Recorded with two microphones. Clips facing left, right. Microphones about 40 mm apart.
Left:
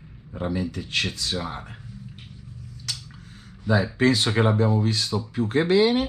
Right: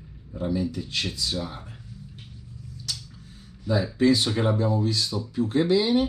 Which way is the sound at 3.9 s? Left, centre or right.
Left.